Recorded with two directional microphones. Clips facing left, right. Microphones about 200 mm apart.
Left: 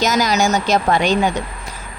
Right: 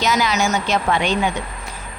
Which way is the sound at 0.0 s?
45° left (ahead or behind).